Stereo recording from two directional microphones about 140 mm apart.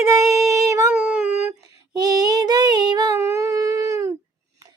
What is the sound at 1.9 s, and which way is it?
Female singing, 30° right (ahead or behind).